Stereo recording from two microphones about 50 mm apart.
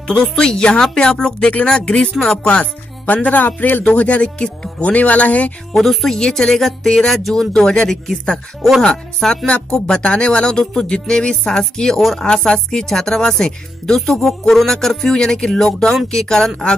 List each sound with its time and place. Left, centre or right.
0.0 s speech: centre
3.1 s speech: left
3.8 s speech: left
5.7 s speech: centre
12.0 s speech: centre
12.3 s speech: centre